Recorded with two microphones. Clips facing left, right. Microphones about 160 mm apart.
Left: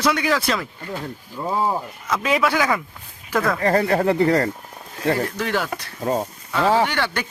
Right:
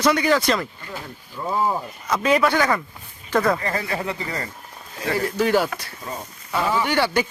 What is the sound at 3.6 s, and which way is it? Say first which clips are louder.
Speech: left 8 dB; 55° left (ahead or behind).